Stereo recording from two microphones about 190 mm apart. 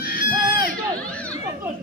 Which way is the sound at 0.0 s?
50° left (ahead or behind).